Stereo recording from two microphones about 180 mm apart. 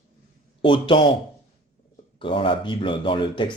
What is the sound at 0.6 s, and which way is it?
Speech, 25° left (ahead or behind).